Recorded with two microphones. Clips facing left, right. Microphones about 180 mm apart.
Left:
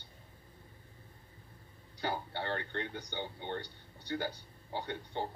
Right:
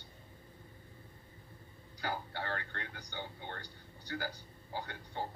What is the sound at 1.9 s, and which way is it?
A man's voice, 25° left (ahead or behind).